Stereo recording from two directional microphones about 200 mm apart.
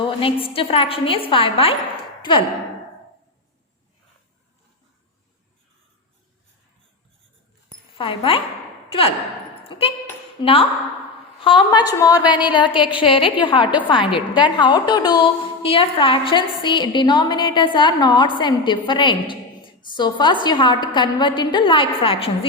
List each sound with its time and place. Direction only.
0.0 s a woman's voice: 25° left (ahead or behind)
7.9 s a woman's voice: 25° left (ahead or behind)
9.6 s a sound: 30° left (ahead or behind)
10.4 s a woman's voice: 30° left (ahead or behind)